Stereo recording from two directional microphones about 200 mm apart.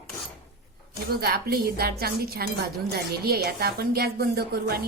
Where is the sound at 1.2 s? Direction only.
50° right (ahead or behind).